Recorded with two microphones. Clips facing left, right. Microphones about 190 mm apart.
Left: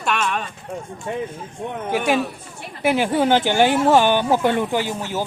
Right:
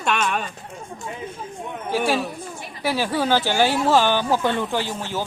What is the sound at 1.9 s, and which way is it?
Speech, 15° left (ahead or behind).